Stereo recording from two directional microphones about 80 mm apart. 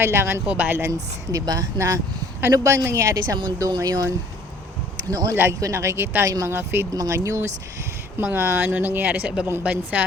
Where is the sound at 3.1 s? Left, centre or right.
Right.